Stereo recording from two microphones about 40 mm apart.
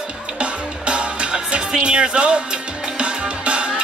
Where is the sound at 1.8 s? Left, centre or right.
Right.